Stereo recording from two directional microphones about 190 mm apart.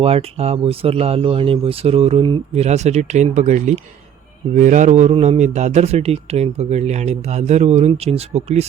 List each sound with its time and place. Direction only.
0.0 s a man's voice: 30° right (ahead or behind)